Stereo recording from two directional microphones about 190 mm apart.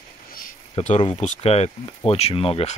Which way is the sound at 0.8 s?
30° left (ahead or behind).